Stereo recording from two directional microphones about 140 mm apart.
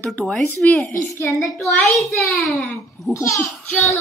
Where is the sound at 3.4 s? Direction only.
15° left (ahead or behind).